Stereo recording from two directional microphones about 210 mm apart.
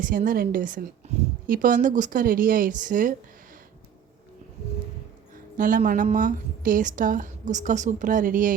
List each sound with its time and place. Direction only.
0.0 s a woman's voice: 40° right (ahead or behind)
5.5 s a woman's voice: 40° right (ahead or behind)